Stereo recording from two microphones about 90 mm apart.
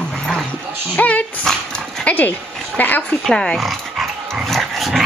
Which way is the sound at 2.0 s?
20° left (ahead or behind).